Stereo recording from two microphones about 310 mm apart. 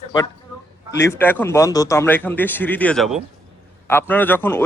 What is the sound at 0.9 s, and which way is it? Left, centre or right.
Speech, centre.